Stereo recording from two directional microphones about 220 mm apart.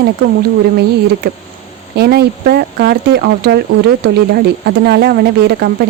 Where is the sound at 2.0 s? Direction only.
45° right (ahead or behind).